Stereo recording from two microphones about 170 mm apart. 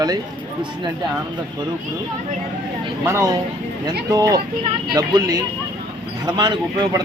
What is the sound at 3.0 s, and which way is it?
Speech, 15° right (ahead or behind).